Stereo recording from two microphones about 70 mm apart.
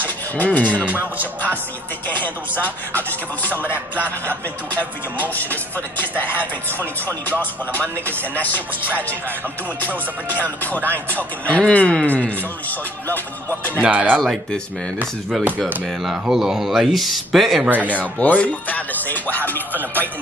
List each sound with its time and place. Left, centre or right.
0.4 s speech: left
0.8 s music: right
2.0 s speech: left
5.2 s speech: left
6.3 s speech: right
7.2 s speech: left
10.3 s speech: left
13.7 s music: right
16.0 s speech: centre
17.7 s speech: left
19.7 s music: right